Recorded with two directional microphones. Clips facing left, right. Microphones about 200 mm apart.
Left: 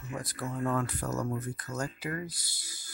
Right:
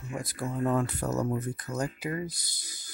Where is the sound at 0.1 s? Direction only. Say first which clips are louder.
Right 3 dB; 10° right (ahead or behind).